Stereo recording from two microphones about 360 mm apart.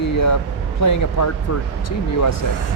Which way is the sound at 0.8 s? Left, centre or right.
Left.